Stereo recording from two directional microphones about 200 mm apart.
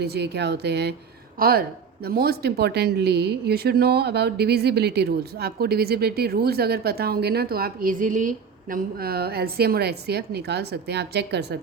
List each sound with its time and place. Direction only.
0.0 s speech: 55° right (ahead or behind)